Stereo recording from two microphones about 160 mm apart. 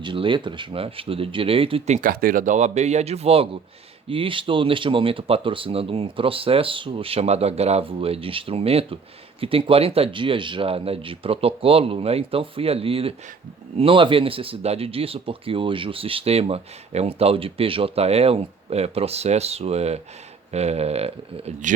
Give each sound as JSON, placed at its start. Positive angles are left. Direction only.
{"t": 0.0, "sound": "speech", "side_deg": -30}
{"t": 2.0, "sound": "speech", "side_deg": -60}